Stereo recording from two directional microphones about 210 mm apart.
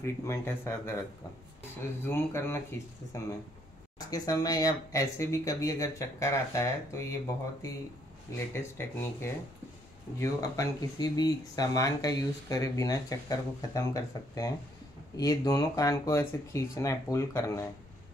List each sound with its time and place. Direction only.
0.0 s speech: 10° left (ahead or behind)
2.0 s speech: 10° left (ahead or behind)
8.5 s speech: 10° left (ahead or behind)